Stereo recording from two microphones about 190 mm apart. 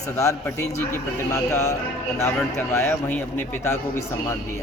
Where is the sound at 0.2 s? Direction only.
15° left (ahead or behind).